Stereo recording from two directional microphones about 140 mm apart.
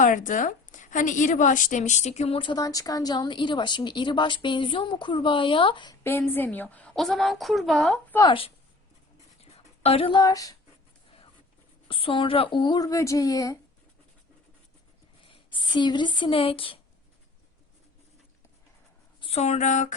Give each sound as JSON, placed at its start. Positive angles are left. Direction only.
{"t": 0.0, "sound": "a woman's voice", "side_deg": 70}
{"t": 2.4, "sound": "speech", "side_deg": 30}
{"t": 6.0, "sound": "a woman's voice", "side_deg": 15}
{"t": 8.2, "sound": "speech", "side_deg": 40}
{"t": 9.4, "sound": "a sound", "side_deg": 45}
{"t": 11.9, "sound": "speech", "side_deg": 40}
{"t": 15.2, "sound": "speech", "side_deg": 35}
{"t": 19.2, "sound": "a woman's voice", "side_deg": 50}